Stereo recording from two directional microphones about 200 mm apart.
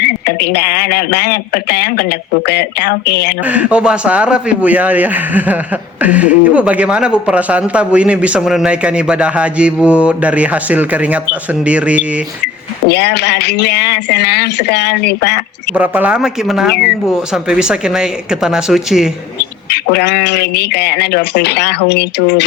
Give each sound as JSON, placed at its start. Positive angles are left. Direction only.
{"t": 0.0, "sound": "speech", "side_deg": 50}
{"t": 3.4, "sound": "a man's voice", "side_deg": -5}
{"t": 12.9, "sound": "speech", "side_deg": 55}
{"t": 15.7, "sound": "a man's voice", "side_deg": -10}
{"t": 19.7, "sound": "speech", "side_deg": 55}